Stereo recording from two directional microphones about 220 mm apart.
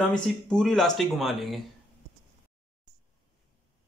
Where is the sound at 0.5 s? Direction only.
Centre (ahead or behind).